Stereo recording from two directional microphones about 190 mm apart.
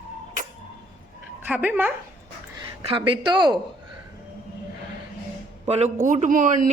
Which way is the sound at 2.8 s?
25° right (ahead or behind).